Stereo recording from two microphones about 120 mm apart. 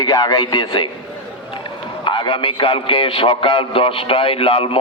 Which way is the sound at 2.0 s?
40° left (ahead or behind).